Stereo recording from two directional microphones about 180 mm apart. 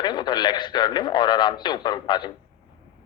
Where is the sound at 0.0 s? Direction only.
25° left (ahead or behind).